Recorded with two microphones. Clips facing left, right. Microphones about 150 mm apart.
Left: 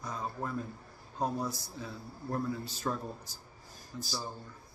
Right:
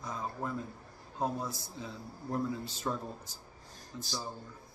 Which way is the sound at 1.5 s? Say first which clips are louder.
Left 1 dB; 20° right (ahead or behind).